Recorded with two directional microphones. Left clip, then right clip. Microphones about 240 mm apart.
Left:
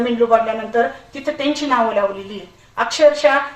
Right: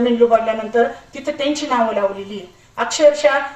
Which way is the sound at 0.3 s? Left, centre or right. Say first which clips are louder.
Even; left.